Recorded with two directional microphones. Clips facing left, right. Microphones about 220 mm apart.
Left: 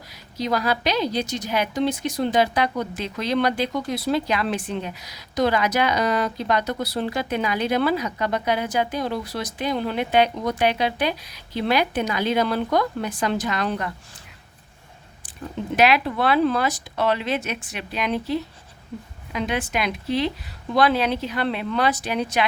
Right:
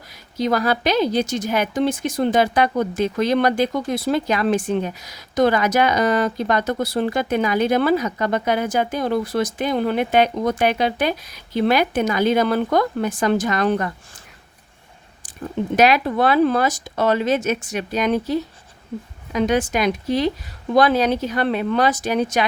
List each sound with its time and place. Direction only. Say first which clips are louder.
0.3 s a woman's voice: right 4 dB; 50° right (ahead or behind)
15.7 s a woman's voice: right 3 dB; 45° right (ahead or behind)